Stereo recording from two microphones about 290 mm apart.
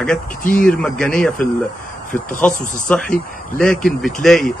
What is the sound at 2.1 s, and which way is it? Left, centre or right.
Speech, left.